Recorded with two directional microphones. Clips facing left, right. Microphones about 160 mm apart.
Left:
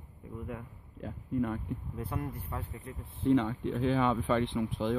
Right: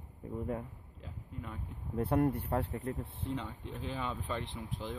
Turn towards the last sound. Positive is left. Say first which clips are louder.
# left 10 dB
turn(degrees=70)  # may be behind; listen again after turning